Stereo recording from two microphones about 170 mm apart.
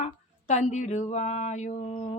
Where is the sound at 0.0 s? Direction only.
45° left (ahead or behind).